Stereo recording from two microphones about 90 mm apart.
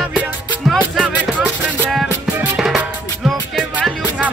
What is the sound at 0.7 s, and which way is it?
Music, 15° right (ahead or behind).